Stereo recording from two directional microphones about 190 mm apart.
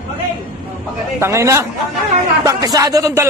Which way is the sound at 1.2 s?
15° right (ahead or behind).